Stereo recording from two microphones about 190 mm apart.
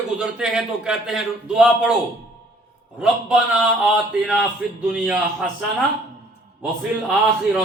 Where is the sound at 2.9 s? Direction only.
5° right (ahead or behind).